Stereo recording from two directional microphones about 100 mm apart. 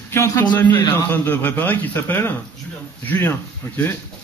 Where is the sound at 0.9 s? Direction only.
20° left (ahead or behind).